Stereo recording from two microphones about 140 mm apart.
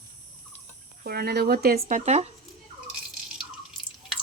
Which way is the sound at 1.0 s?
90° right.